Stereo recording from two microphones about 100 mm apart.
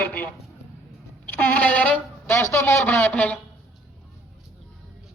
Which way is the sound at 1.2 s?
15° left (ahead or behind).